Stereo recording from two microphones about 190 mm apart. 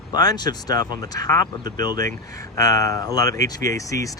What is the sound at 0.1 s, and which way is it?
Speech, 20° left (ahead or behind).